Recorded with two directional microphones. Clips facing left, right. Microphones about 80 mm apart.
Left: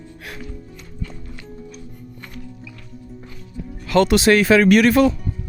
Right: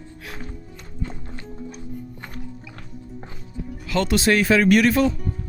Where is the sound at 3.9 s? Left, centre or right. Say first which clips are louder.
Left 5 dB; left.